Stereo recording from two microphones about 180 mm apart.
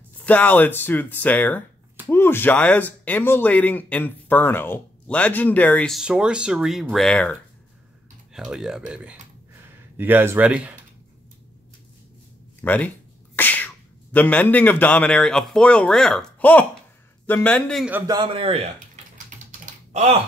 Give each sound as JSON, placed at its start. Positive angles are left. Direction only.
{"t": 0.2, "sound": "speech", "side_deg": 10}
{"t": 12.6, "sound": "speech", "side_deg": 10}
{"t": 13.4, "sound": "sneeze", "side_deg": 10}
{"t": 14.1, "sound": "speech", "side_deg": 10}
{"t": 18.0, "sound": "a man's voice", "side_deg": -25}
{"t": 19.6, "sound": "typing", "side_deg": -40}